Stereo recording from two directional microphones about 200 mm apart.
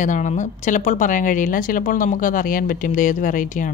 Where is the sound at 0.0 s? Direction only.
40° left (ahead or behind).